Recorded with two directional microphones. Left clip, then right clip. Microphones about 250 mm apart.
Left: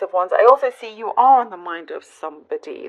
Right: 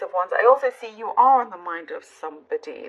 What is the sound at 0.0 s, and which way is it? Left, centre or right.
A woman's voice, left.